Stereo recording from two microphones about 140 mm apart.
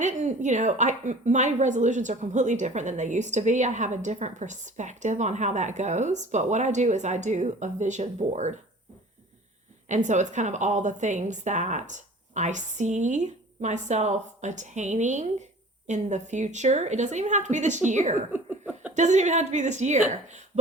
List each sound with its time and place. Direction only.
0.0 s a woman's voice: 60° right (ahead or behind)
9.9 s a woman's voice: 60° right (ahead or behind)
18.3 s a sound: 15° right (ahead or behind)
18.9 s a woman's voice: 55° right (ahead or behind)